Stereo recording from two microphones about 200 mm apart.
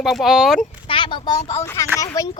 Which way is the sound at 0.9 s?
25° left (ahead or behind).